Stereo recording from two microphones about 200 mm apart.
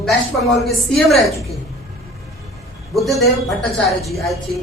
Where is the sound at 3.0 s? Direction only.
Centre (ahead or behind).